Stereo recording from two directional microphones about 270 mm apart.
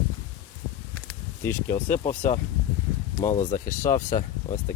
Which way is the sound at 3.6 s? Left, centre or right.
Centre.